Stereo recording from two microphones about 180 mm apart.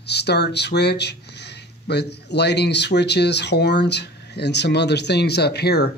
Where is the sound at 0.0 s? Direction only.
65° left (ahead or behind).